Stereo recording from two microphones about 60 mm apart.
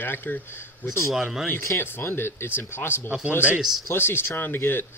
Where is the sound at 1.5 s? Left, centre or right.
Left.